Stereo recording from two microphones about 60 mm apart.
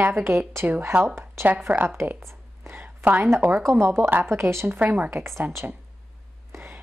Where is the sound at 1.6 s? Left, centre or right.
Right.